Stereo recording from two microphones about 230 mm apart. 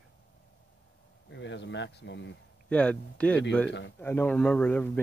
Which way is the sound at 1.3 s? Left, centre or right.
Left.